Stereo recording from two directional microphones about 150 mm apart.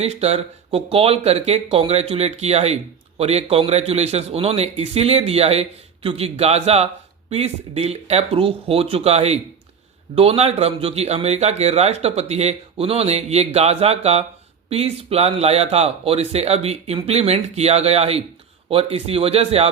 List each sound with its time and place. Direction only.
0.0 s a man's voice: 45° right (ahead or behind)